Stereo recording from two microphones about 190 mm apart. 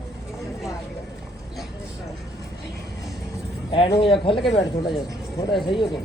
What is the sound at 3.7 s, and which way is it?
Speech, 30° left (ahead or behind).